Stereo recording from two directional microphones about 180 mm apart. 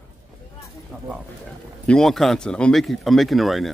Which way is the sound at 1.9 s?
Centre (ahead or behind).